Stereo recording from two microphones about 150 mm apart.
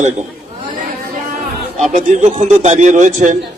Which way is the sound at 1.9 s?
50° right (ahead or behind).